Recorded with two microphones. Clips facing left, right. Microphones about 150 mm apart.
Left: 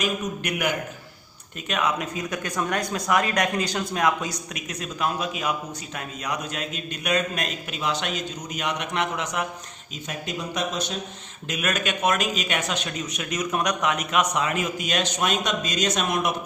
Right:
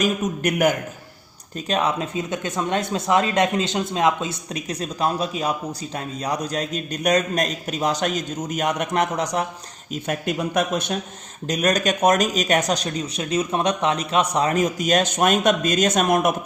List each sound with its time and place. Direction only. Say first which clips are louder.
0.0 s a man's voice: right 6 dB; 45° right (ahead or behind)
1.5 s speech: right 4 dB; 35° right (ahead or behind)
9.9 s speech: right 7 dB; 55° right (ahead or behind)
11.4 s speech: right 6 dB; 40° right (ahead or behind)